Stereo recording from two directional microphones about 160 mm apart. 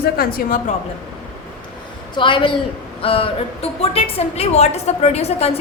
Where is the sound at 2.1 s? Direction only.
30° left (ahead or behind).